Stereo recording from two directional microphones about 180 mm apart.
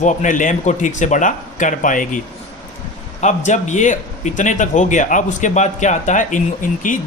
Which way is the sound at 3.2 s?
40° left (ahead or behind).